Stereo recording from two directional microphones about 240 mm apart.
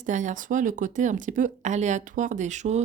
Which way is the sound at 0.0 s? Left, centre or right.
Right.